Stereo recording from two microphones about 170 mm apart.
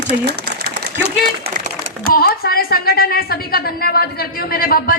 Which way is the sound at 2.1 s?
65° left (ahead or behind).